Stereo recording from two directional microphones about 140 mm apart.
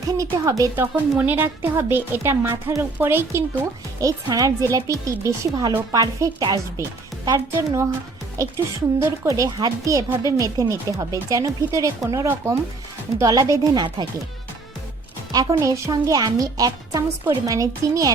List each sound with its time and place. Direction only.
0.2 s a woman's voice: 25° right (ahead or behind)
15.3 s a woman's voice: 25° right (ahead or behind)